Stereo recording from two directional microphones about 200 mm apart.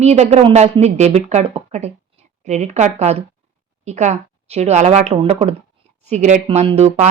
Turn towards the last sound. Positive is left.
turn(degrees=-30)  # may be behind; listen again after turning